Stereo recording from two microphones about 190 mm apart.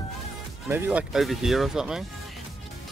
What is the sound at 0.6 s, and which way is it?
Speech, 10° right (ahead or behind).